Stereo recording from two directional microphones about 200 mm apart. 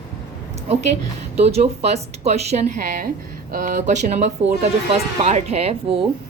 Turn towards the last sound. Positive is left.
turn(degrees=-30)  # may be behind; listen again after turning